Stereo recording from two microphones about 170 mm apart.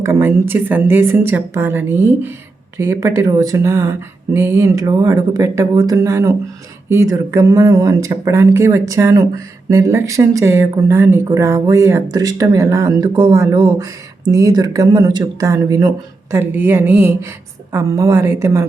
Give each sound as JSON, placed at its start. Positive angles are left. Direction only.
{"t": 0.0, "sound": "speech", "side_deg": -15}